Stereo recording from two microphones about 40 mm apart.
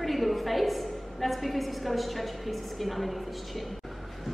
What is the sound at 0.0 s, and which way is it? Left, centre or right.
A woman's voice, centre.